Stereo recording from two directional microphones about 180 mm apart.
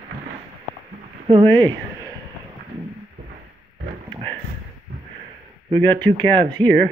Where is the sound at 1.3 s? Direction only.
25° right (ahead or behind).